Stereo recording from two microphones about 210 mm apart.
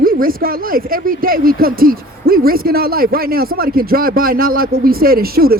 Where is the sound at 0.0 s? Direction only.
45° right (ahead or behind).